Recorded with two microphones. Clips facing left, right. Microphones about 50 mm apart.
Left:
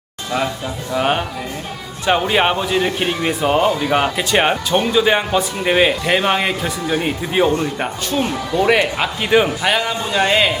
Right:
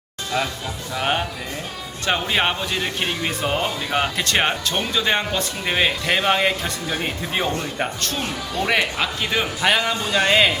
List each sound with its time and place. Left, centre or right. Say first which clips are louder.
0.9 s a man's voice: left 5 dB; centre
7.4 s speech: left 10 dB; left
7.8 s speech: left 5 dB; centre
9.0 s speech: left 7 dB; centre
9.6 s a man's voice: left 1 dB; centre